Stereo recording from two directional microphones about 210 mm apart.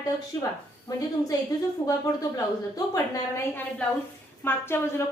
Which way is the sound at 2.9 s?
15° left (ahead or behind).